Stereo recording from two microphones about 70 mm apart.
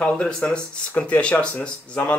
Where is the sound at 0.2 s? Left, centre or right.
Centre.